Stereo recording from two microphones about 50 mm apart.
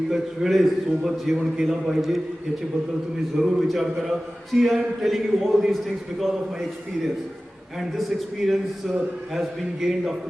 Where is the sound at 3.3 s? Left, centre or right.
Centre.